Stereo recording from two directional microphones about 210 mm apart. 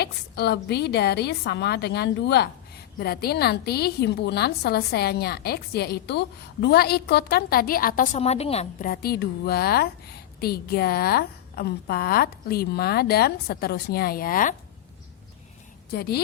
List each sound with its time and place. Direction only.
0.0 s a woman's voice: 50° left (ahead or behind); by 8.9 s 30° left (ahead or behind)
8.9 s a woman's voice: 45° left (ahead or behind)
15.9 s a woman's voice: 50° left (ahead or behind)